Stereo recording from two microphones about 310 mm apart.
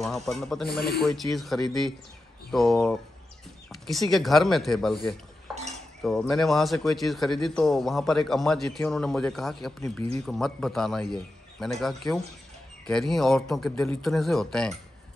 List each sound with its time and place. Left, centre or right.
0.0 s a man's voice: centre
5.5 s cutlery: centre
6.0 s a man's voice: centre